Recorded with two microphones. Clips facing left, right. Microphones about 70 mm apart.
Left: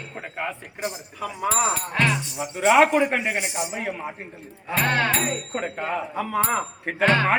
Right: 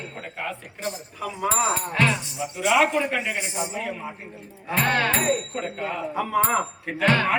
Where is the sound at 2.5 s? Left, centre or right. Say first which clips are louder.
Left 4 dB; left.